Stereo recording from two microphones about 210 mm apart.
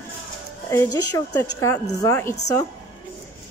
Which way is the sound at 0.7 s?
15° left (ahead or behind).